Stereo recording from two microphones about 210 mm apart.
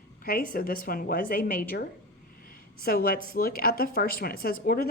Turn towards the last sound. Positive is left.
turn(degrees=45)  # may be behind; listen again after turning